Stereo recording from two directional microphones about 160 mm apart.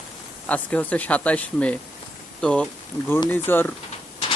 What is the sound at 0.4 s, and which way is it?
Speech, 10° left (ahead or behind).